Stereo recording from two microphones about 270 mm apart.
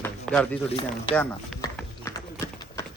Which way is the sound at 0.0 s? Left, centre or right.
Centre.